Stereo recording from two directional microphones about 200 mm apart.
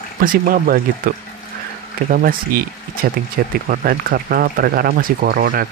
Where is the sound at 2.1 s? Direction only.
45° right (ahead or behind).